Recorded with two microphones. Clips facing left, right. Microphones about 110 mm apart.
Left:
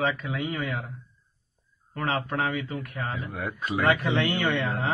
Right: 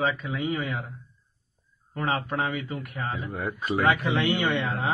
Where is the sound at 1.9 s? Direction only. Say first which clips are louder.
Even; 20° right (ahead or behind).